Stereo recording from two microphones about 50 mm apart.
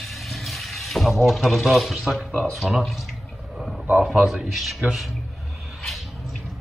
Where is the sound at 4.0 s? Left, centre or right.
Centre.